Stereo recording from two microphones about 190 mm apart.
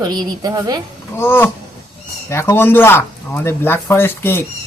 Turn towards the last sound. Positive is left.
turn(degrees=10)  # may be behind; listen again after turning